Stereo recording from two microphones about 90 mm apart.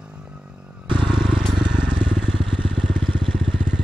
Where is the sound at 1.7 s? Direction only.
10° right (ahead or behind).